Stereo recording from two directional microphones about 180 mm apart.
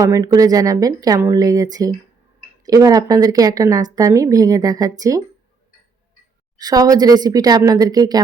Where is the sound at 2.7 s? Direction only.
20° right (ahead or behind).